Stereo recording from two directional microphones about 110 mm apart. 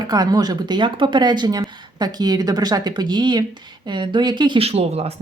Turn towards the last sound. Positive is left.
turn(degrees=-70)  # may be behind; listen again after turning